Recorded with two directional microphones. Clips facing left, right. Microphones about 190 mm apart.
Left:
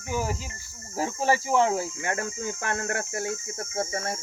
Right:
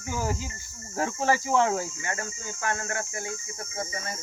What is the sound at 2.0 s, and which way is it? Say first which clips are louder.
Speech: left 5 dB; 60° left (ahead or behind).